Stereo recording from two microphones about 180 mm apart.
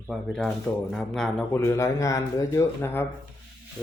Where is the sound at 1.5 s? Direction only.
15° left (ahead or behind).